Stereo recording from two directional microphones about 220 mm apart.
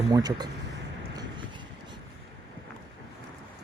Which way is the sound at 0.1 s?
15° right (ahead or behind).